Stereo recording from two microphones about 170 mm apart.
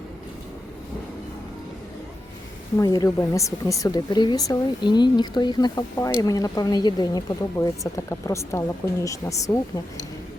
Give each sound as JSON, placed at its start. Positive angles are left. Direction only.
{"t": 2.7, "sound": "speech", "side_deg": 20}